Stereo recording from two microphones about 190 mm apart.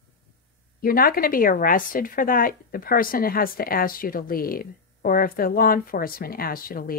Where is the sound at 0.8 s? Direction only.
50° left (ahead or behind).